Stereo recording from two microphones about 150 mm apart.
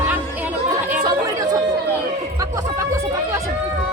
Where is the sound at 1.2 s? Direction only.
25° right (ahead or behind).